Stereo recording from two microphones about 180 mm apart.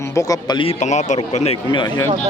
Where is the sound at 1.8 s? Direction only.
25° left (ahead or behind).